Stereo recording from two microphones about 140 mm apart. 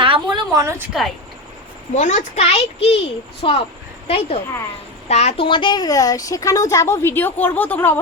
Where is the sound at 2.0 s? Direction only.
60° left (ahead or behind); by 3.6 s 40° left (ahead or behind).